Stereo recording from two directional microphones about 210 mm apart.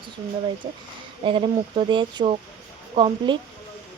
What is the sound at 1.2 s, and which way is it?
Speech, 25° right (ahead or behind).